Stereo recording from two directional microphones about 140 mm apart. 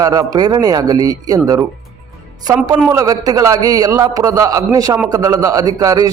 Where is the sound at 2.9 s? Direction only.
25° right (ahead or behind).